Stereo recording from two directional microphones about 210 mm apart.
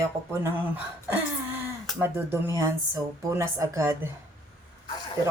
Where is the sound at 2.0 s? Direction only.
10° right (ahead or behind).